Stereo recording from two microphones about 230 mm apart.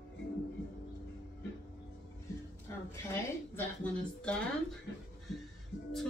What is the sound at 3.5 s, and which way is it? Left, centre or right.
Speech, centre.